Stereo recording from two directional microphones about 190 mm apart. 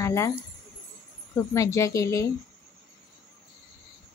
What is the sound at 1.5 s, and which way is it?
Speech, 15° left (ahead or behind).